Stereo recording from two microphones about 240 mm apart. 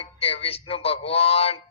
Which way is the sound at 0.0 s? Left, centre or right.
Left.